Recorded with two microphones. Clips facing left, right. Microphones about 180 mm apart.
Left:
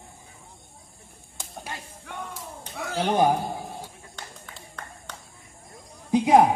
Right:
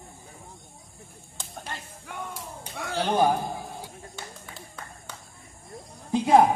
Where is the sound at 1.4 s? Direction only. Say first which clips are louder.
Left 1 dB; 10° left (ahead or behind).